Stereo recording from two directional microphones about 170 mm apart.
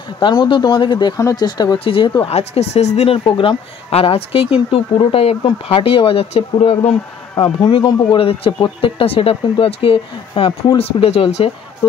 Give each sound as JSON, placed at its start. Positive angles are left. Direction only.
{"t": 0.2, "sound": "speech", "side_deg": 25}